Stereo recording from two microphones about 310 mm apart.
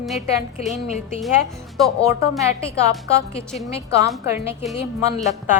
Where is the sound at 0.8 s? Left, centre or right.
Left.